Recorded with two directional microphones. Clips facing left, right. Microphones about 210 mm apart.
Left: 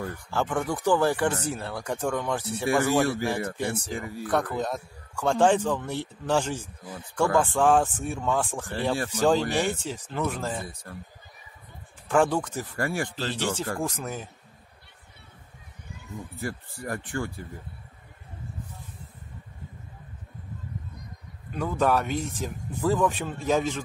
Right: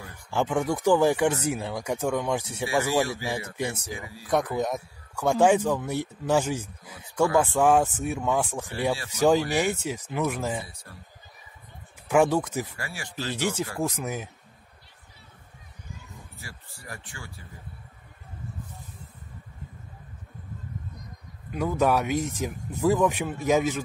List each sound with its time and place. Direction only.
0.3 s speech: 15° right (ahead or behind)
4.0 s speech: 55° left (ahead or behind)
4.3 s speech: 15° right (ahead or behind)
8.9 s speech: 50° left (ahead or behind)
9.2 s speech: 10° right (ahead or behind)
10.9 s speech: 50° left (ahead or behind)
12.1 s speech: 10° right (ahead or behind)
12.7 s speech: 55° left (ahead or behind)
13.1 s speech: 15° right (ahead or behind)
16.3 s speech: 55° left (ahead or behind)
21.5 s speech: 10° right (ahead or behind)